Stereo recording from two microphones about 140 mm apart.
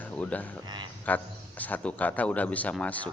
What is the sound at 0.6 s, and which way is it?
Speech, 30° right (ahead or behind).